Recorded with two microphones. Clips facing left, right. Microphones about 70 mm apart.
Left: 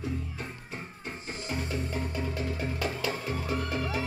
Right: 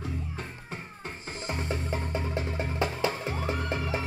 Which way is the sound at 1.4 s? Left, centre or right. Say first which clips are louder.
Right 2 dB; right.